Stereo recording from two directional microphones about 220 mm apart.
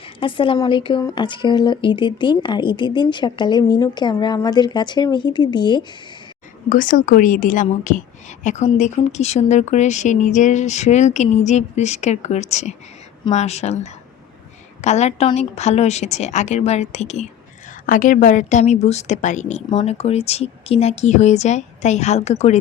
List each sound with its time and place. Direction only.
0.2 s a woman's voice: 25° left (ahead or behind)
6.7 s speech: 35° left (ahead or behind)